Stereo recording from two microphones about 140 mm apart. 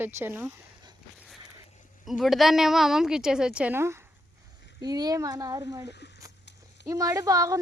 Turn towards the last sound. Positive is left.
turn(degrees=-25)  # may be behind; listen again after turning